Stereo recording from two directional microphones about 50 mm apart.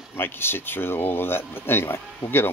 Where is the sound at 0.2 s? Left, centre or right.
Left.